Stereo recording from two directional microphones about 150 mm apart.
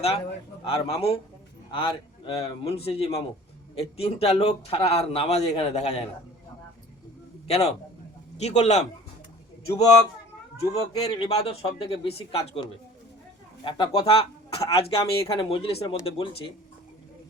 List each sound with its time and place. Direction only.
0.6 s speech: 40° left (ahead or behind)
7.4 s a man's voice: 45° left (ahead or behind)
10.8 s speech: 25° left (ahead or behind)
11.3 s speech: 40° left (ahead or behind)
13.7 s speech: 30° left (ahead or behind)